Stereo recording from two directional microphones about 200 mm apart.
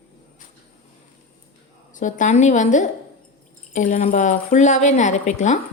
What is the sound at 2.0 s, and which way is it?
A woman's voice, 40° left (ahead or behind).